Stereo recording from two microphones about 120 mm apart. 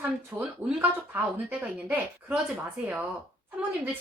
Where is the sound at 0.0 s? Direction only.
15° right (ahead or behind).